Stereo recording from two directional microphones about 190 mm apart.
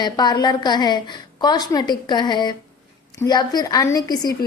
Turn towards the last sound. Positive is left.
turn(degrees=20)  # may be behind; listen again after turning